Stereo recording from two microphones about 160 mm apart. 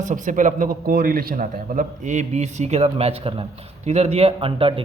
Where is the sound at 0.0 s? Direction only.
55° right (ahead or behind).